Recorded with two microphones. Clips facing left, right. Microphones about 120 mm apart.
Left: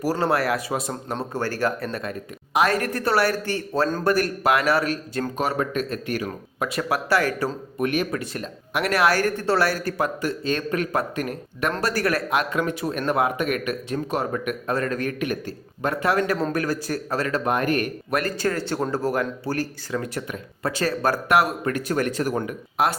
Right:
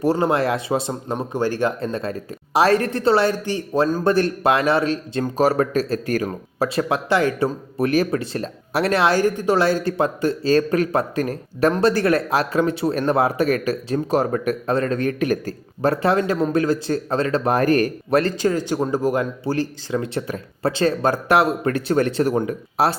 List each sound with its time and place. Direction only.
0.0 s speech: 20° right (ahead or behind)
4.0 s speech: 25° right (ahead or behind)
5.4 s speech: 35° right (ahead or behind); by 7.5 s 20° right (ahead or behind)
7.8 s speech: 35° right (ahead or behind)
18.3 s speech: 15° right (ahead or behind); by 23.0 s 30° right (ahead or behind)